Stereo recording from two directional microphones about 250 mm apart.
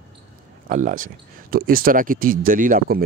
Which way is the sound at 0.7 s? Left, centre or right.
Right.